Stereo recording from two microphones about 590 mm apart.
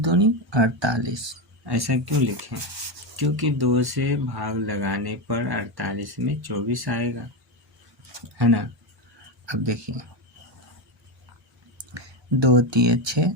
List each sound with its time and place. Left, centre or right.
0.0 s speech: right
8.4 s speech: right
11.9 s speech: right